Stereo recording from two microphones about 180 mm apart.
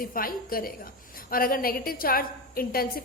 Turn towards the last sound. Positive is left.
turn(degrees=55)  # may be behind; listen again after turning